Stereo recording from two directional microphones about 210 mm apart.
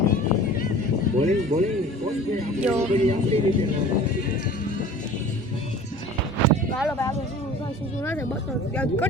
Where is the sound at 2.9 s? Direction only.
30° right (ahead or behind).